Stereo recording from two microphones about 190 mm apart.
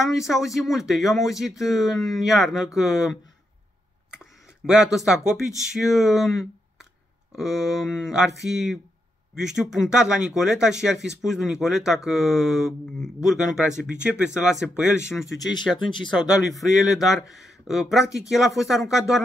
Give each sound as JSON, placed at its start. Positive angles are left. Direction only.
{"t": 0.5, "sound": "speech", "side_deg": 0}
{"t": 4.1, "sound": "a sound", "side_deg": -5}
{"t": 5.6, "sound": "speech", "side_deg": 0}
{"t": 15.0, "sound": "speech", "side_deg": 15}
{"t": 16.4, "sound": "speech", "side_deg": 0}